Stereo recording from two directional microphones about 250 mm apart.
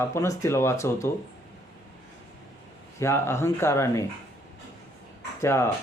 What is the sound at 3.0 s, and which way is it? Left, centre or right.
Speech, centre.